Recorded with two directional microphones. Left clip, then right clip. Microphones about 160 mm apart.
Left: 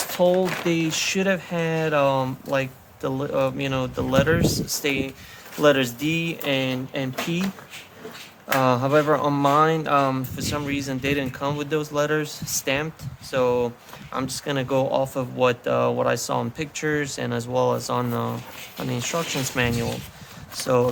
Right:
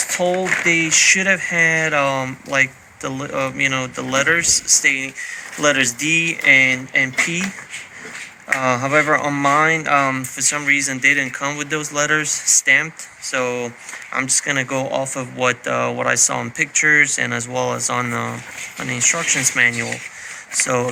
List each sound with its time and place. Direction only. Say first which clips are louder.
0.1 s speech: even; 45° left (ahead or behind)
0.4 s speech: right 8 dB; centre (ahead or behind)
0.7 s speech: right 10 dB; 45° left (ahead or behind)
8.6 s speech: right 2 dB; 40° left (ahead or behind)
8.9 s speech: right 4 dB; 15° left (ahead or behind)
9.2 s speech: right 3 dB; 40° left (ahead or behind)